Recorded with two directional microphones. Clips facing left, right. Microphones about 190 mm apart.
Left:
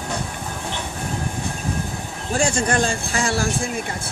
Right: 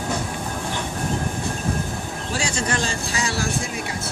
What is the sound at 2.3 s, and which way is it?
Speech, 50° left (ahead or behind).